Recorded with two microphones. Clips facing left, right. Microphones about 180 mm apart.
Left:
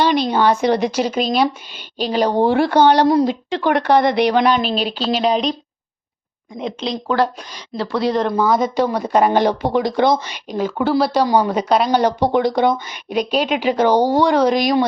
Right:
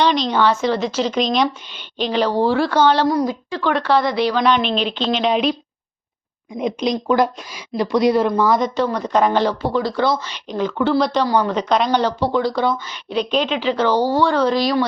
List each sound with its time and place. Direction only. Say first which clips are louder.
0.0 s a woman's voice: left 1 dB; 10° left (ahead or behind)
1.7 s a sound: even; 40° left (ahead or behind)
2.5 s speech: left 2 dB; 55° left (ahead or behind)
2.7 s speech: left 5 dB; 15° left (ahead or behind)
4.5 s a sound: even; 40° left (ahead or behind)
5.3 s a woman's voice: even; 5° right (ahead or behind)
6.6 s speech: right 4 dB; 15° right (ahead or behind)
8.3 s speech: even; centre (ahead or behind); by 14.8 s 15° left (ahead or behind)